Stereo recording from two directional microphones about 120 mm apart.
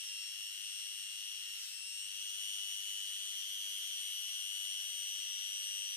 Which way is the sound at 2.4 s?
15° left (ahead or behind).